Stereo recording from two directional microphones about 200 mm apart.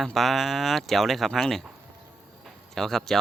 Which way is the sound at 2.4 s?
Centre (ahead or behind).